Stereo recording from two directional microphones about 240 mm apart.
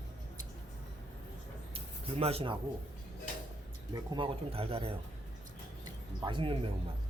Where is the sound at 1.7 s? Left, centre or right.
Right.